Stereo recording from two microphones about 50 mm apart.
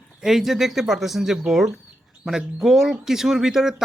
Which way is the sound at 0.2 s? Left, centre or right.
Centre.